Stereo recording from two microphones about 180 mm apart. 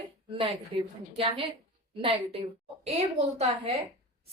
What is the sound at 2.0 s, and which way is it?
A woman's voice, 30° right (ahead or behind).